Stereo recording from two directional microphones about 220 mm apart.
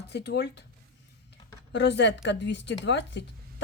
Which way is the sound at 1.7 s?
50° left (ahead or behind).